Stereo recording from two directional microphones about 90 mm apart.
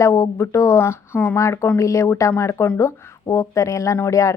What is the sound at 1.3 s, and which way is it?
Speech, 35° left (ahead or behind).